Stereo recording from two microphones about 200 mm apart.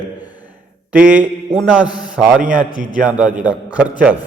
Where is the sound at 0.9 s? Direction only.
5° right (ahead or behind).